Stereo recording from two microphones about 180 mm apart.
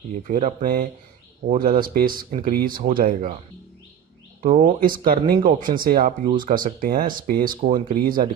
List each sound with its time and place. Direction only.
0.2 s speech: 45° right (ahead or behind)
4.4 s speech: 45° right (ahead or behind)